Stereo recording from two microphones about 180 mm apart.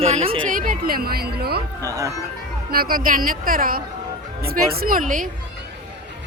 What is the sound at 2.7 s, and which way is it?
A woman's voice, 55° right (ahead or behind).